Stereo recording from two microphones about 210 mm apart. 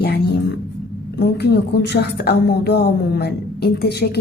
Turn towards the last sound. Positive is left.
turn(degrees=50)  # may be behind; listen again after turning